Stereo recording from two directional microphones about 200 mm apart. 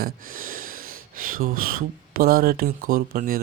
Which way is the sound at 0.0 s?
45° right (ahead or behind).